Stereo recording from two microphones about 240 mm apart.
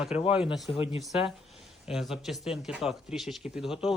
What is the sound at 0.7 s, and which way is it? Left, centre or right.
Speech, left.